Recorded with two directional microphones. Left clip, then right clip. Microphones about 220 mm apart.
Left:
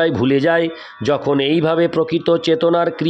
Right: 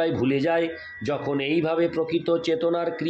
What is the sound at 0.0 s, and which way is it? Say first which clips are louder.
Speech: left 8 dB; 45° left (ahead or behind).